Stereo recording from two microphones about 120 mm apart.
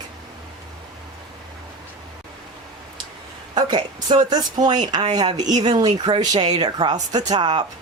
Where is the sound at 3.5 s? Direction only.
35° right (ahead or behind).